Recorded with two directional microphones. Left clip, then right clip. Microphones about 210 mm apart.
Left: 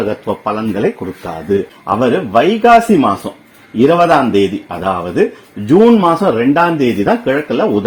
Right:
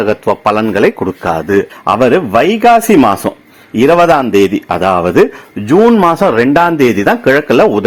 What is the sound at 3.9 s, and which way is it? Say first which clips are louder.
Speech: right 3 dB; 20° right (ahead or behind).